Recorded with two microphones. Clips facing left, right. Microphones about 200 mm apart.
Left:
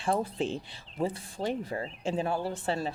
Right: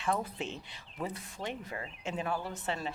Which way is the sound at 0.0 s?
30° left (ahead or behind).